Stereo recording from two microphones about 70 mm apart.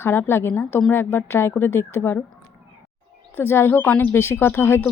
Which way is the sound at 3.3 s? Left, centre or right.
Left.